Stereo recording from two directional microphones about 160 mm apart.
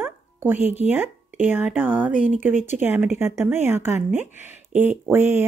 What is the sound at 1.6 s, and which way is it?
A woman's voice, 10° right (ahead or behind).